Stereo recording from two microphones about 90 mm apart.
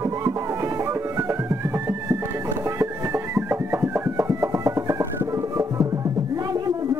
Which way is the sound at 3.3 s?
25° right (ahead or behind).